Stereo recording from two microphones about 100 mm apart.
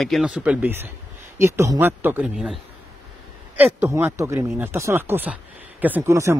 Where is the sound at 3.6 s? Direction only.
25° right (ahead or behind).